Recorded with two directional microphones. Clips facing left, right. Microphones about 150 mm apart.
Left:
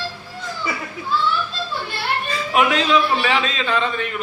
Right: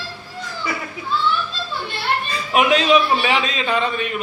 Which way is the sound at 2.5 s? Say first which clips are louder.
Right 2 dB; 20° right (ahead or behind).